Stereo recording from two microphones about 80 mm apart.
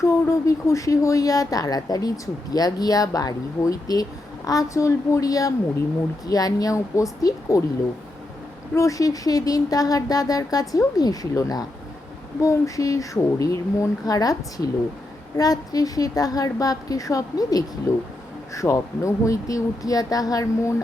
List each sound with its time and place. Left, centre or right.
0.0 s speech: left
8.7 s speech: left